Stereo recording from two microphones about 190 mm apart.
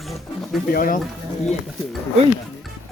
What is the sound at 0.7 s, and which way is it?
Speech, 50° left (ahead or behind).